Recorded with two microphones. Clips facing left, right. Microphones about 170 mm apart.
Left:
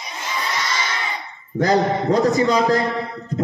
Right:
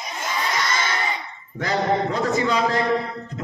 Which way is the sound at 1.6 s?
40° left (ahead or behind).